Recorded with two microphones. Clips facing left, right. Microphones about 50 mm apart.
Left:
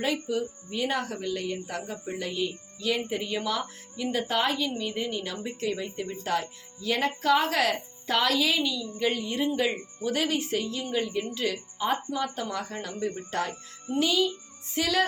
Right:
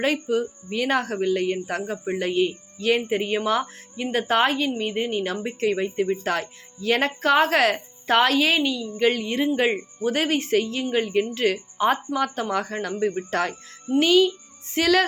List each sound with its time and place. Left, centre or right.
0.0 s speech: right
9.0 s speech: right
10.0 s speech: right